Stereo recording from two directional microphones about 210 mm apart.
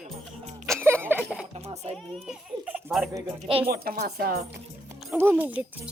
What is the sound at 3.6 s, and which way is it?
Speech, 45° right (ahead or behind).